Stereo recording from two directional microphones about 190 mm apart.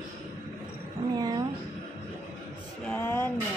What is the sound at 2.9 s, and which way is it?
Speech, 10° left (ahead or behind).